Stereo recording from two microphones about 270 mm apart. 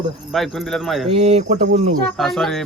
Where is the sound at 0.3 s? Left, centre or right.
Centre.